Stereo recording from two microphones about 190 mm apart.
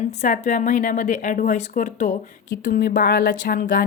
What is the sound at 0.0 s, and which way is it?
A woman's voice, 35° left (ahead or behind).